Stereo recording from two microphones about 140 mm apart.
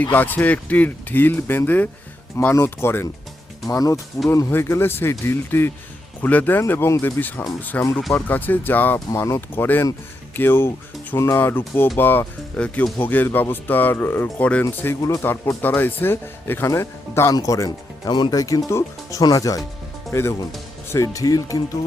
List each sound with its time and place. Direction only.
0.0 s speech: 10° left (ahead or behind)